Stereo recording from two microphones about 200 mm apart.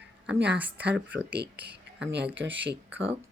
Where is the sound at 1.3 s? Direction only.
60° right (ahead or behind).